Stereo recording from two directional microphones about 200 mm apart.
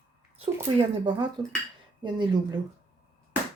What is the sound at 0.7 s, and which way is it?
Speech, 20° right (ahead or behind).